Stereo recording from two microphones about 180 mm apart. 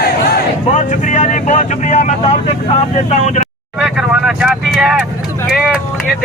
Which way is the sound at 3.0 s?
40° left (ahead or behind).